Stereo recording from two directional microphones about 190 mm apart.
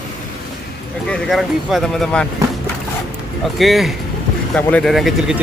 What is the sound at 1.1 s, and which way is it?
Speech, centre (ahead or behind).